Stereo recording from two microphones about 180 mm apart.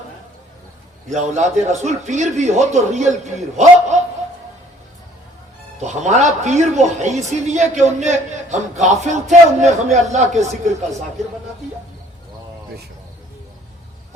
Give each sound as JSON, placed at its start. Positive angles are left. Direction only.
{"t": 1.1, "sound": "a man's voice", "side_deg": -40}
{"t": 5.8, "sound": "speech", "side_deg": -40}